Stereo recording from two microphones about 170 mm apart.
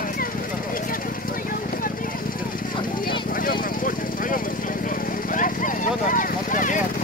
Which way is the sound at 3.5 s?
55° left (ahead or behind).